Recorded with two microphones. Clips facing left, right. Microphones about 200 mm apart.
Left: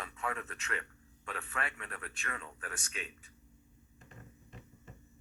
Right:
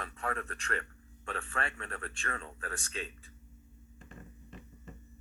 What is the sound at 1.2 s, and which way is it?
Speech, 30° right (ahead or behind).